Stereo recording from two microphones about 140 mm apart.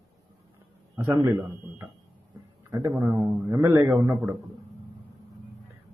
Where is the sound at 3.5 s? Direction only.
15° right (ahead or behind).